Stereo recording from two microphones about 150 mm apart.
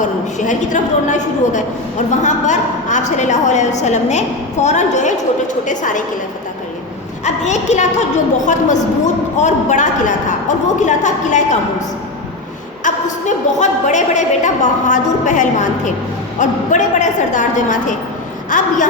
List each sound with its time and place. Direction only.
0.0 s a woman's voice: 55° left (ahead or behind)
7.3 s a woman's voice: 50° left (ahead or behind)
12.8 s a woman's voice: 55° left (ahead or behind)